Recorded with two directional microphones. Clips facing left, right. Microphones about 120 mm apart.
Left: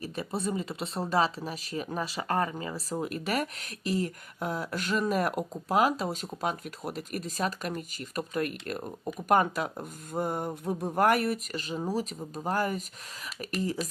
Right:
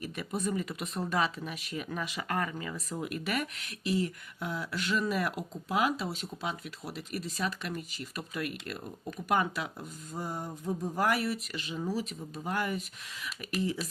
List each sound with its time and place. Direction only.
0.0 s speech: 30° left (ahead or behind)
13.8 s speech: centre (ahead or behind)